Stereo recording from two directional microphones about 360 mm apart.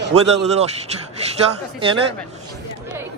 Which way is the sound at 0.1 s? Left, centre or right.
Centre.